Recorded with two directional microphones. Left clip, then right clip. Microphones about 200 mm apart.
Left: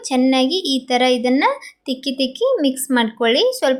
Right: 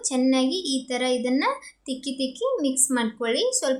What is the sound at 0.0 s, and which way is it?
A woman's voice, 25° left (ahead or behind).